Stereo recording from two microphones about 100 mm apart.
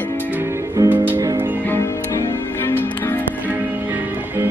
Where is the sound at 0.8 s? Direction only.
30° right (ahead or behind).